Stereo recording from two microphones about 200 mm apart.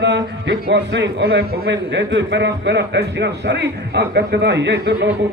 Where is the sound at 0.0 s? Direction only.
60° right (ahead or behind).